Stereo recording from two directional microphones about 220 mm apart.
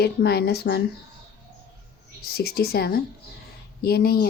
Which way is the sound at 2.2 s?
45° left (ahead or behind).